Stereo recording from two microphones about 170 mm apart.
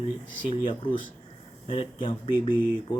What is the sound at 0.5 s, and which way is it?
Speech, 30° left (ahead or behind).